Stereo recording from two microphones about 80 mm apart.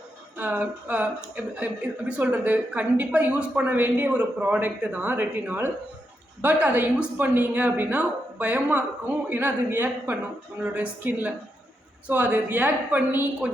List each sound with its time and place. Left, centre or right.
0.3 s a woman's voice: right